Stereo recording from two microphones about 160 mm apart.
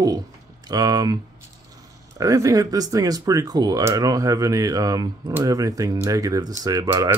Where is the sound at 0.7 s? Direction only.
25° right (ahead or behind).